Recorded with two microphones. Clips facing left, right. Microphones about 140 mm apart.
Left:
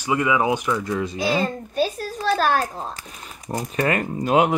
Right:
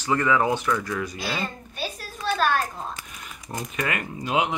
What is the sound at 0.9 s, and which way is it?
Speech, 25° left (ahead or behind).